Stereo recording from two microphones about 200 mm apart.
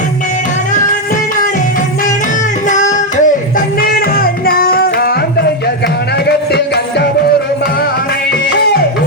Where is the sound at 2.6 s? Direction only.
40° left (ahead or behind).